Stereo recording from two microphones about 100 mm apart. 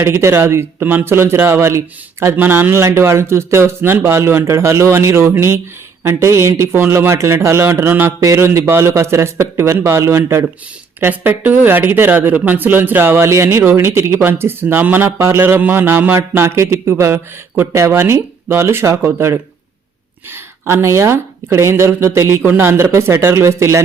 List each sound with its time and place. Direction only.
0.0 s speech: 25° right (ahead or behind)